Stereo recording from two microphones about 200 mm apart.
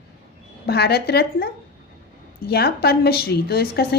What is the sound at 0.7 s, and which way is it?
A woman's voice, 55° left (ahead or behind).